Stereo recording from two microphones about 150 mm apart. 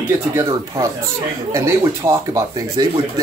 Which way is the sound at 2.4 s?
25° right (ahead or behind).